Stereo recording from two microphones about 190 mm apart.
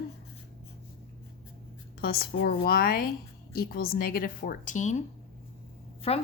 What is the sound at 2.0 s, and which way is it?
Speech, 55° left (ahead or behind).